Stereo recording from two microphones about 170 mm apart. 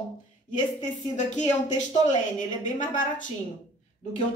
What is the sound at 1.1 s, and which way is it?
A woman's voice, 45° left (ahead or behind).